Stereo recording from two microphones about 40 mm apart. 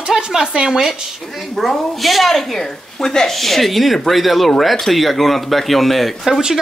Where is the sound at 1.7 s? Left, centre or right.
Centre.